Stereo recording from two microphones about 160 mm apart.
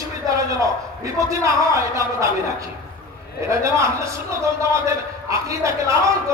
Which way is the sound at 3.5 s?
20° right (ahead or behind).